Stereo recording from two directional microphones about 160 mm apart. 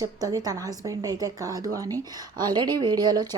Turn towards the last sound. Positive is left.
turn(degrees=-25)  # may be behind; listen again after turning